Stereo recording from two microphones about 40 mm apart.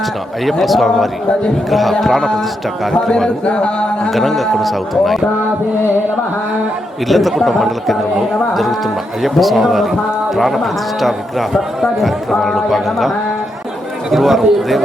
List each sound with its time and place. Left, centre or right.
0.6 s a man's voice: centre
3.4 s speech: left
4.1 s a man's voice: centre
7.1 s a man's voice: centre
9.2 s a man's voice: centre